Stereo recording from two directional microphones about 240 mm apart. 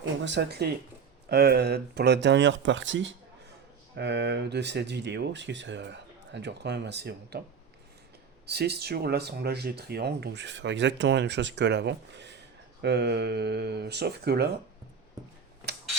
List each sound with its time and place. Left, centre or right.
0.2 s speech: right
8.4 s speech: right